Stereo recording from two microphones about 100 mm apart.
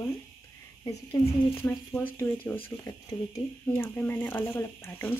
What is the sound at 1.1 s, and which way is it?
Speech, 25° left (ahead or behind).